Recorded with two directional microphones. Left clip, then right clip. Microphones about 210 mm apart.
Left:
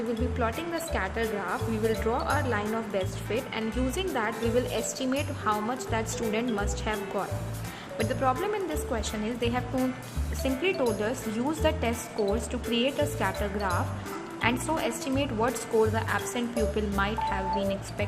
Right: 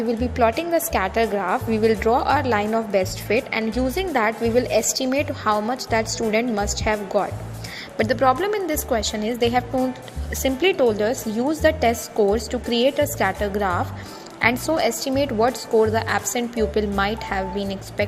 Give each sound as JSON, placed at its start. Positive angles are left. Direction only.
{"t": 0.3, "sound": "a woman's voice", "side_deg": -25}